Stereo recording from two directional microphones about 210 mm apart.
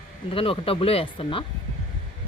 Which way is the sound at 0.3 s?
25° left (ahead or behind).